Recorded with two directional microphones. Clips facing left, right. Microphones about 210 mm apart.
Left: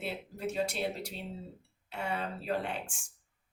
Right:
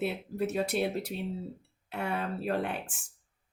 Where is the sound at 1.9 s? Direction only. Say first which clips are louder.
Right 3 dB; 55° right (ahead or behind).